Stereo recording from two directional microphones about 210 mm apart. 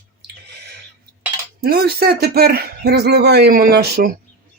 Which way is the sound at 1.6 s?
50° right (ahead or behind).